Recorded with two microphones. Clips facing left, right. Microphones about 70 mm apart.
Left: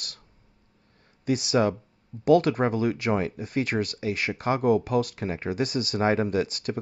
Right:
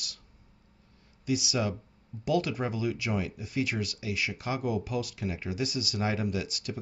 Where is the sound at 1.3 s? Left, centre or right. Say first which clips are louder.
Left 7 dB; left.